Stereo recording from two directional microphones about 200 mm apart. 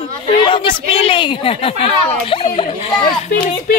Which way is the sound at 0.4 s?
25° left (ahead or behind).